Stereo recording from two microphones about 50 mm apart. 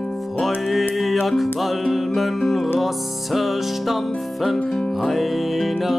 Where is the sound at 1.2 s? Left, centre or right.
Centre.